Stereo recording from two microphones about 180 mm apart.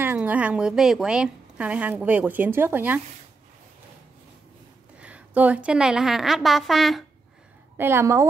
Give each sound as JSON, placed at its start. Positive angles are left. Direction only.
{"t": 0.0, "sound": "a woman's voice", "side_deg": -10}
{"t": 4.9, "sound": "a woman's voice", "side_deg": -5}
{"t": 7.7, "sound": "a woman's voice", "side_deg": -15}